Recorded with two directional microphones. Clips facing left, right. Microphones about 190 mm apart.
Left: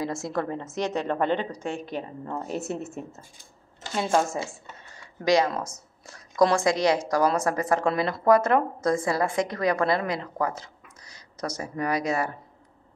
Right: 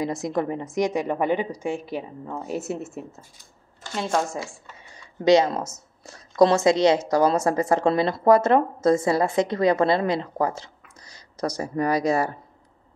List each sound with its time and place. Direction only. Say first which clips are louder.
0.0 s a woman's voice: right 3 dB; 15° right (ahead or behind); by 4.4 s 5° left (ahead or behind)
4.7 s a sound: right 1 dB; 15° right (ahead or behind)
5.2 s a woman's voice: right 4 dB; 25° right (ahead or behind)